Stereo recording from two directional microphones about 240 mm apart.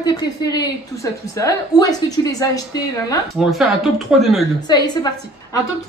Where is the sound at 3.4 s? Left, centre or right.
Centre.